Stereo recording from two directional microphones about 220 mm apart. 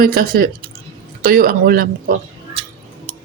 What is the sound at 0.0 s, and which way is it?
Speech, 40° right (ahead or behind).